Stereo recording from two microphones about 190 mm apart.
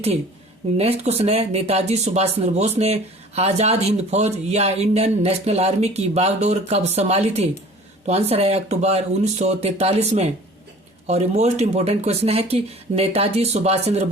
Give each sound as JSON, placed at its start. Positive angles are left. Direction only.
{"t": 0.8, "sound": "speech", "side_deg": -35}